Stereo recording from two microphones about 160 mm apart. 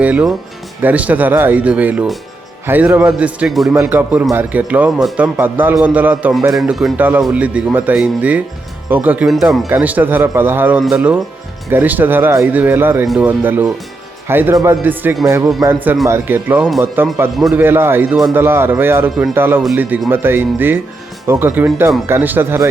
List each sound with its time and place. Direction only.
0.0 s a man's voice: 10° right (ahead or behind)